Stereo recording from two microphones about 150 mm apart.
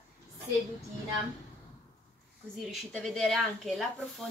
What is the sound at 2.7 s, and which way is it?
Speech, centre (ahead or behind).